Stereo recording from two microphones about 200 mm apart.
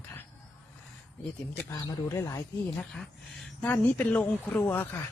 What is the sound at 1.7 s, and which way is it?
Speech, 15° left (ahead or behind).